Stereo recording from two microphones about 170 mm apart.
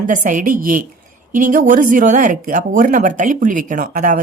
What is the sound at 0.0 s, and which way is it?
Speech, 50° right (ahead or behind).